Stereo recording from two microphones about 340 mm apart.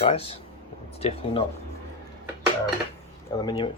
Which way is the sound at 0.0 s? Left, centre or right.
Centre.